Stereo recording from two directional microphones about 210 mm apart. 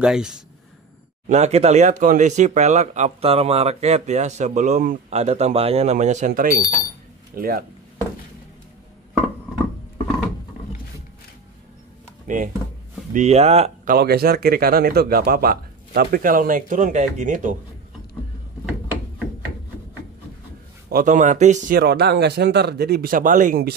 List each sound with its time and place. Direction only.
0.0 s speech: 5° right (ahead or behind)
1.3 s speech: 30° right (ahead or behind)
12.3 s speech: 40° right (ahead or behind)
13.9 s speech: 45° right (ahead or behind)
18.7 s mechanisms: 5° right (ahead or behind)
20.9 s speech: 35° right (ahead or behind)